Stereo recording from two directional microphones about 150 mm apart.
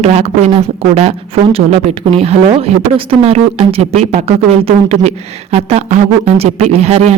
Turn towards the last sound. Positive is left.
turn(degrees=-45)  # may be behind; listen again after turning